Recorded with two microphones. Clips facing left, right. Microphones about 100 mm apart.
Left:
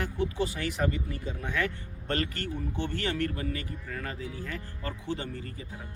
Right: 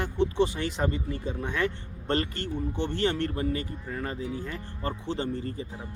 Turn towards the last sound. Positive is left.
turn(degrees=-30)  # may be behind; listen again after turning